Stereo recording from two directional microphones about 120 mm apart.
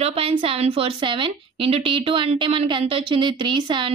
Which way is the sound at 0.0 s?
55° right (ahead or behind).